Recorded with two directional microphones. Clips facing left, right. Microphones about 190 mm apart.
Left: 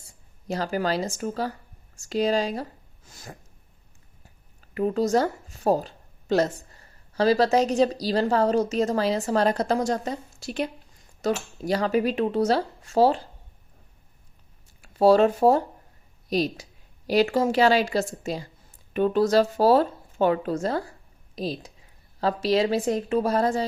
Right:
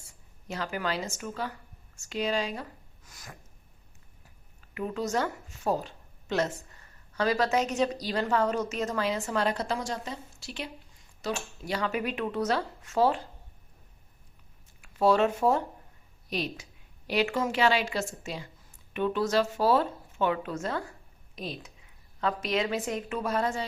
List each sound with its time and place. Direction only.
0.4 s speech: 35° left (ahead or behind)
4.7 s speech: 35° left (ahead or behind)
14.8 s speech: 35° left (ahead or behind)